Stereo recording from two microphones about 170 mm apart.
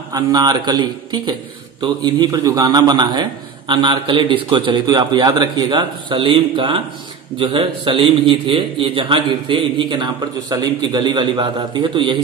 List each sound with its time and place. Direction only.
0.1 s a man's voice: 20° right (ahead or behind)